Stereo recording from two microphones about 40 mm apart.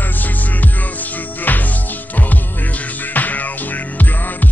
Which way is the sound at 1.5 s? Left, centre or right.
Left.